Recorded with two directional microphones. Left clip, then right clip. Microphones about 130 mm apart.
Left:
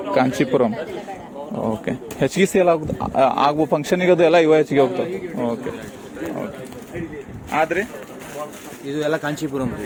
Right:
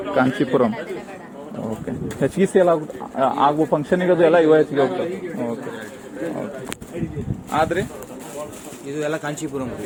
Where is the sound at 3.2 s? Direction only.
70° left (ahead or behind).